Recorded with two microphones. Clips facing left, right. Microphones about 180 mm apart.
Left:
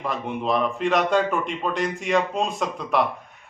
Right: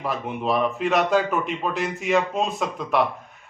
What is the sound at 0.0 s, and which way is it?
Speech, 5° right (ahead or behind).